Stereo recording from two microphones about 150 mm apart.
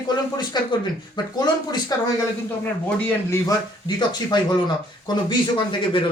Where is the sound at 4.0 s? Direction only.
30° left (ahead or behind).